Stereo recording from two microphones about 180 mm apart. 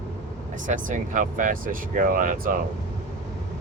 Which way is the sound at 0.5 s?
45° right (ahead or behind).